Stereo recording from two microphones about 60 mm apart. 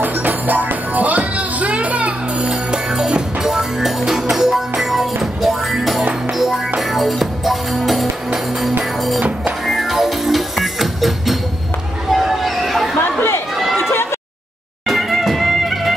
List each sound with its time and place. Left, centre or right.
0.0 s music: right
2.9 s music: centre
12.1 s a sound: centre
13.7 s run: left
14.9 s music: centre